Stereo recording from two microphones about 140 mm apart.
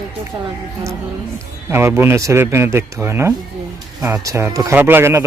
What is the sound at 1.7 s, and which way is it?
Speech, 15° right (ahead or behind).